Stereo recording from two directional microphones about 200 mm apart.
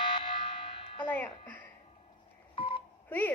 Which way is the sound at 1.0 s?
10° left (ahead or behind).